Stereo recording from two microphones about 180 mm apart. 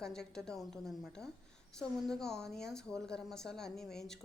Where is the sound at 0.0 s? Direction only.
5° left (ahead or behind).